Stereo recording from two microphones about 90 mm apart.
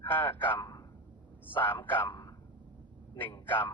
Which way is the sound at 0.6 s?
45° left (ahead or behind).